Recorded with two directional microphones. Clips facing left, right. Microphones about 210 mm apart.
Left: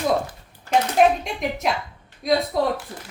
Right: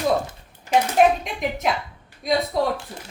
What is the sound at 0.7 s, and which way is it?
Speech, 15° right (ahead or behind).